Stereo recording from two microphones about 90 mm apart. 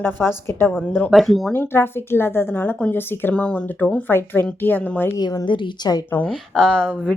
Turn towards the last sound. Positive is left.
turn(degrees=10)  # may be behind; listen again after turning